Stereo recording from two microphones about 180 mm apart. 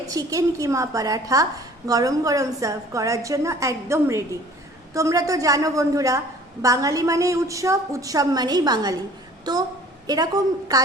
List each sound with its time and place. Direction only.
0.1 s a woman's voice: 20° right (ahead or behind)